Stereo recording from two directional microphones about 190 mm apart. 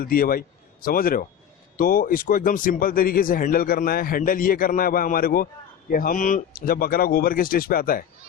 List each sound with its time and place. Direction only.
0.0 s a man's voice: 50° left (ahead or behind)